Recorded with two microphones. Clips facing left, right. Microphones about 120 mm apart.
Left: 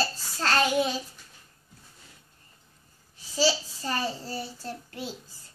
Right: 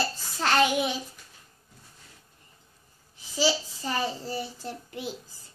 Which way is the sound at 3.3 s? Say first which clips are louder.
Even; 15° right (ahead or behind).